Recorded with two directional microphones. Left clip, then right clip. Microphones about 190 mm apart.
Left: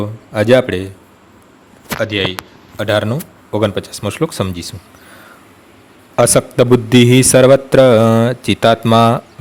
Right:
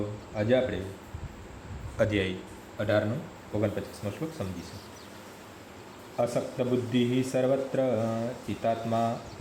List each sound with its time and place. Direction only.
0.3 s speech: 55° left (ahead or behind)
2.0 s a man's voice: 15° left (ahead or behind)
2.7 s speech: 45° left (ahead or behind)
3.5 s speech: 60° left (ahead or behind)
6.1 s a man's voice: 75° left (ahead or behind)